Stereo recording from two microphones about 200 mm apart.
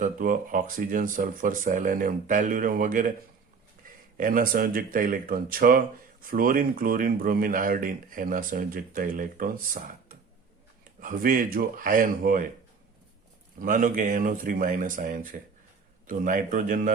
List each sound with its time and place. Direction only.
0.0 s speech: 45° right (ahead or behind)
4.2 s speech: 45° right (ahead or behind)
11.0 s speech: 45° right (ahead or behind)
13.6 s speech: 45° right (ahead or behind)